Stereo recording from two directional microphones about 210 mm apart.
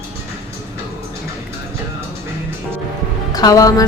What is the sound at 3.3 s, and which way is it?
Speech, 15° left (ahead or behind).